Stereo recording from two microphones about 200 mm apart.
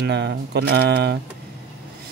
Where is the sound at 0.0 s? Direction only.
60° right (ahead or behind).